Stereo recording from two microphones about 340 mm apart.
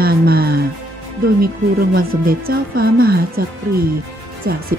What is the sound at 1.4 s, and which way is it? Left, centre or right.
Speech, right.